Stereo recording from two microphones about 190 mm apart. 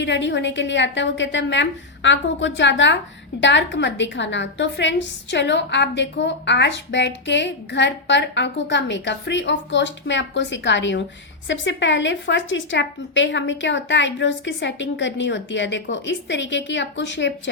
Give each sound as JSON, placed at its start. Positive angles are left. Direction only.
{"t": 0.0, "sound": "a woman's voice", "side_deg": 70}